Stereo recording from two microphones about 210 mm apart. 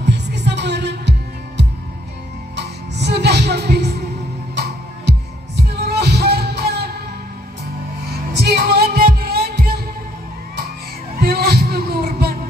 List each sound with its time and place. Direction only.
0.0 s music: 55° right (ahead or behind)
2.5 s music: 55° right (ahead or behind)
5.6 s music: 50° right (ahead or behind)
8.3 s music: 50° right (ahead or behind)
11.1 s heart sounds: 45° right (ahead or behind)